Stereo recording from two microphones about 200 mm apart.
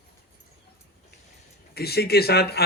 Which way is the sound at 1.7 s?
50° left (ahead or behind).